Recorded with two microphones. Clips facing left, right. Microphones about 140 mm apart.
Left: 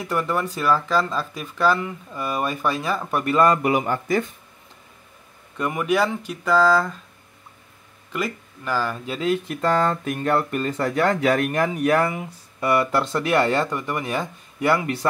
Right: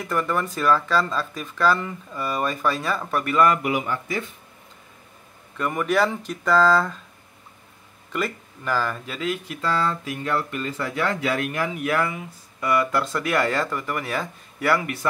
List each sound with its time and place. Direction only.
0.0 s speech: 10° left (ahead or behind)
3.3 s speech: 30° left (ahead or behind)
5.6 s speech: 10° left (ahead or behind)
8.1 s speech: 10° left (ahead or behind)
9.0 s speech: 30° left (ahead or behind)
9.5 s speech: 50° left (ahead or behind); by 15.0 s 25° left (ahead or behind)